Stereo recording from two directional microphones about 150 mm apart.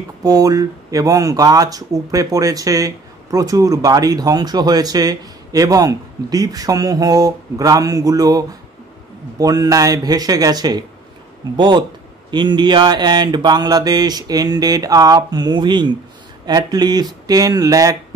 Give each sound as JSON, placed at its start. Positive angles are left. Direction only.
{"t": 0.2, "sound": "speech", "side_deg": -25}